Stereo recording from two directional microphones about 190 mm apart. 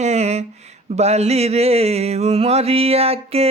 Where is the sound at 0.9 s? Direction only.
35° right (ahead or behind).